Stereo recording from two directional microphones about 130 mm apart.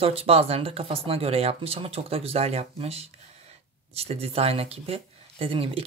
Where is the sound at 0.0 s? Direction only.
45° right (ahead or behind).